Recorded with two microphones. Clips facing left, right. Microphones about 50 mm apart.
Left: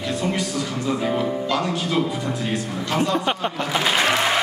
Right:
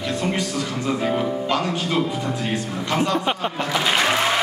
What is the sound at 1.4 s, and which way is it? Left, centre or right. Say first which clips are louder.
Speech: even; right.